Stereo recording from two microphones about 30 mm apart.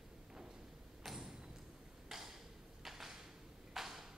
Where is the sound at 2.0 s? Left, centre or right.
Centre.